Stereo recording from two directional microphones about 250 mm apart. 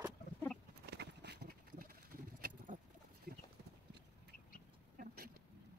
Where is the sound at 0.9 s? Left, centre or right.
Right.